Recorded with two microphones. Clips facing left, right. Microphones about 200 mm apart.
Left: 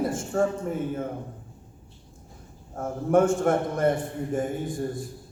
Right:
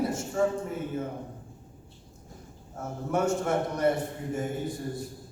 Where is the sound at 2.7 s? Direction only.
50° left (ahead or behind).